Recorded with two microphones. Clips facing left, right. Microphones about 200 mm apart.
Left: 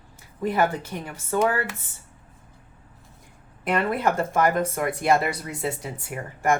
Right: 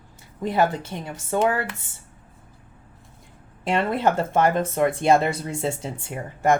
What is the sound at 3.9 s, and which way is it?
Speech, 25° right (ahead or behind).